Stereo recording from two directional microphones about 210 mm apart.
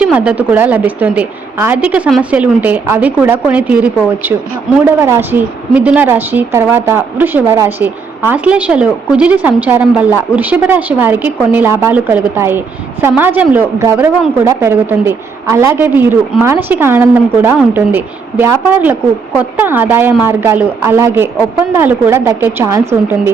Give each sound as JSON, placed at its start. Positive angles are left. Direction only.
{"t": 0.0, "sound": "a woman's voice", "side_deg": -5}